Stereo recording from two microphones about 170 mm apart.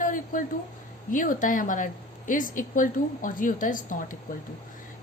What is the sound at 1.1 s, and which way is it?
A woman's voice, 50° left (ahead or behind).